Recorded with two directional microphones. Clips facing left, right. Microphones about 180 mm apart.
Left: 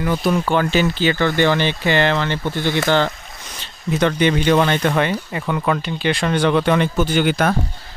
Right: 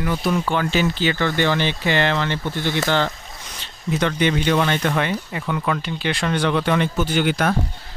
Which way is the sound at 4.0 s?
45° left (ahead or behind).